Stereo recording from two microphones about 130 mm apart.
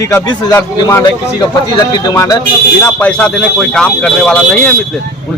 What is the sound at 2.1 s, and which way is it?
Speech, 30° left (ahead or behind).